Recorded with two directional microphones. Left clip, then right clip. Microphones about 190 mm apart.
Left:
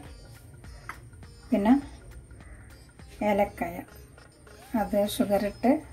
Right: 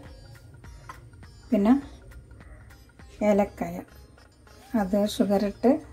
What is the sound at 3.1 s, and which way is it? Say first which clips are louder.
Speech: right 2 dB; 20° right (ahead or behind).